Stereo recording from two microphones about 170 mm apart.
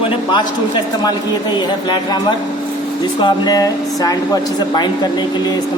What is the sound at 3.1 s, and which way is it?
Speech, 25° left (ahead or behind).